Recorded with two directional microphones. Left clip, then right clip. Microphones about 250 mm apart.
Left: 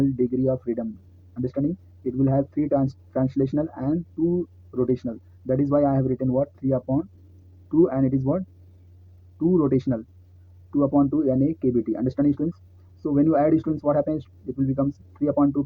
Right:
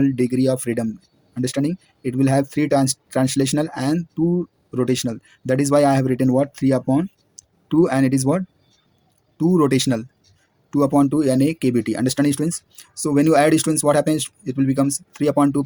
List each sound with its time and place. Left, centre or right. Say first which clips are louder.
0.0 s speech: right 4 dB; right
3.2 s speech: right 2 dB; right
3.5 s speech: right 4 dB; right
11.3 s speech: right 3 dB; right
13.1 s speech: right 5 dB; right
13.5 s speech: right 5 dB; right